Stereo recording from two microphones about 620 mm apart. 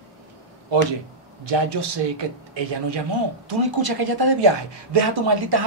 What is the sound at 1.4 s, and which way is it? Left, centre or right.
A man's voice, right.